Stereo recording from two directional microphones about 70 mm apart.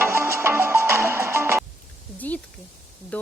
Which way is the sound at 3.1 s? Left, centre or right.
Left.